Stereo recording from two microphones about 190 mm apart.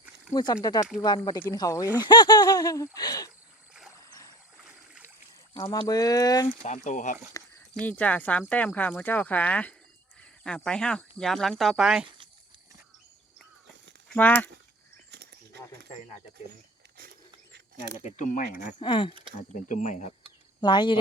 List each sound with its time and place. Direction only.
0.3 s speech: 20° left (ahead or behind)
3.9 s boat: 15° left (ahead or behind)
5.5 s speech: 20° left (ahead or behind)
6.6 s speech: 40° left (ahead or behind)
7.3 s speech: 10° left (ahead or behind)
12.0 s a sound: 25° right (ahead or behind)
14.1 s speech: 10° left (ahead or behind)
18.0 s speech: 40° left (ahead or behind)
18.8 s speech: 25° left (ahead or behind)
19.5 s speech: 40° left (ahead or behind)
20.6 s speech: 25° left (ahead or behind)